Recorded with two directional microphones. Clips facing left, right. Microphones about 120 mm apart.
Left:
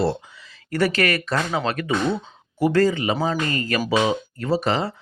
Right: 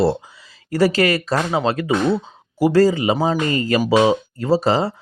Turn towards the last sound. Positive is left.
turn(degrees=-35)  # may be behind; listen again after turning